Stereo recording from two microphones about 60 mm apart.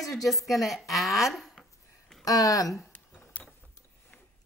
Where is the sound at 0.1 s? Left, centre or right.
Centre.